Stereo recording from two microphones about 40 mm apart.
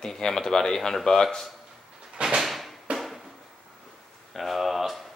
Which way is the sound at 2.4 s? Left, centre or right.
Centre.